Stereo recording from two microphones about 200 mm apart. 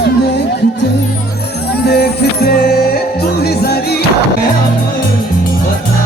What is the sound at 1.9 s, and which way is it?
Music, 50° left (ahead or behind).